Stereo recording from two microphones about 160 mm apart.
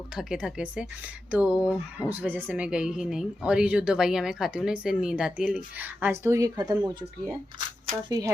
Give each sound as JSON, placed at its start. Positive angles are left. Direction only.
{"t": 0.2, "sound": "speech", "side_deg": -5}
{"t": 8.1, "sound": "speech", "side_deg": -20}